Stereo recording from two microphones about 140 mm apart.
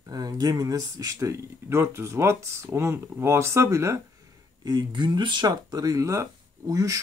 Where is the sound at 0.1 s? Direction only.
25° right (ahead or behind).